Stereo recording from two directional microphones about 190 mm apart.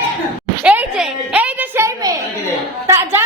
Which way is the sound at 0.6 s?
5° right (ahead or behind).